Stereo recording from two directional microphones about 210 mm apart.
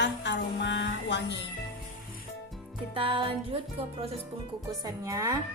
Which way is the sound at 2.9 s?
25° right (ahead or behind).